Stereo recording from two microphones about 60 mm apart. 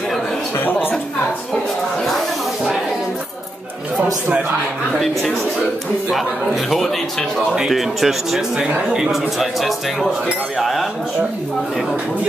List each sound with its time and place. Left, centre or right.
6.0 s a man's voice: centre
9.4 s a man's voice: centre
10.6 s cutlery: centre